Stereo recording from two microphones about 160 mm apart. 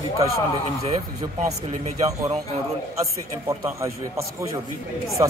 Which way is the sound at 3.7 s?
20° right (ahead or behind).